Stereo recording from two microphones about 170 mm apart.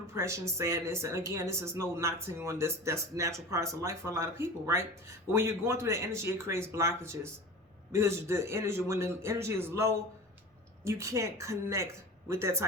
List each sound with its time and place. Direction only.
0.1 s speech: 15° right (ahead or behind)